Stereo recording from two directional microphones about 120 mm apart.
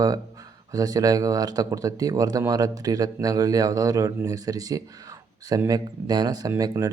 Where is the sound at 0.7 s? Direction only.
30° right (ahead or behind).